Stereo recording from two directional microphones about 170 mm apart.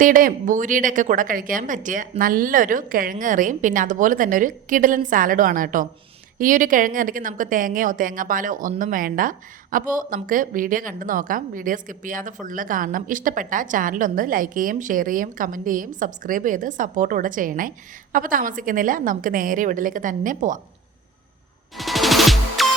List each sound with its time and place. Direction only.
0.0 s a woman's voice: 55° right (ahead or behind)
21.8 s music: centre (ahead or behind)